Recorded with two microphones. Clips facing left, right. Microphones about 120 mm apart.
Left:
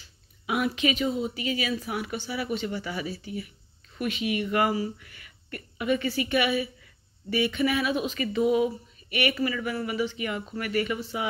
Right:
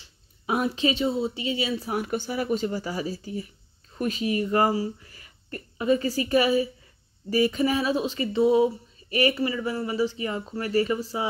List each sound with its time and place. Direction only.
0.0 s speech: 30° right (ahead or behind)